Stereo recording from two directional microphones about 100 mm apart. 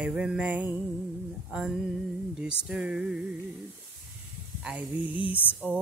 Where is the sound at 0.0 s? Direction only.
10° right (ahead or behind).